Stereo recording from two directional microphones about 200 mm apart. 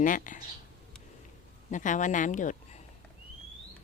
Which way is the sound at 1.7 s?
40° left (ahead or behind).